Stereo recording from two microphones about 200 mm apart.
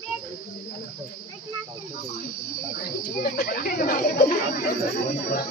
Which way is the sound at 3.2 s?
45° left (ahead or behind).